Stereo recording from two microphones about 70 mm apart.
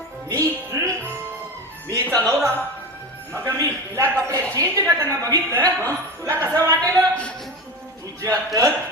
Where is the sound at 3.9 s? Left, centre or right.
Right.